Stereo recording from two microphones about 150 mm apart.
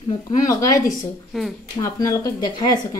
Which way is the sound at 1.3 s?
5° right (ahead or behind).